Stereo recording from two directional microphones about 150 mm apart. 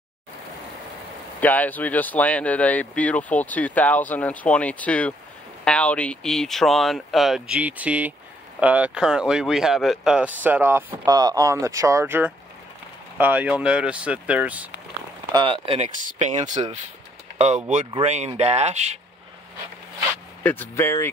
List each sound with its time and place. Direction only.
1.4 s speech: 10° left (ahead or behind); by 11.0 s 15° right (ahead or behind)
11.1 s speech: 25° right (ahead or behind); by 14.7 s 10° right (ahead or behind)
15.3 s speech: 35° right (ahead or behind)
16.1 s speech: 55° right (ahead or behind)
18.0 s speech: 50° right (ahead or behind)
20.4 s speech: 15° left (ahead or behind)